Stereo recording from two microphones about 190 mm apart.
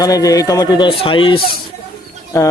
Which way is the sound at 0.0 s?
20° left (ahead or behind).